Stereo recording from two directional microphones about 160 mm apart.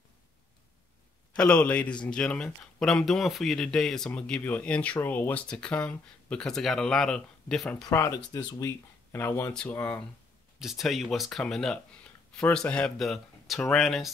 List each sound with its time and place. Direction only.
1.3 s speech: 5° left (ahead or behind)
7.8 s speech: 20° left (ahead or behind)
10.6 s speech: centre (ahead or behind)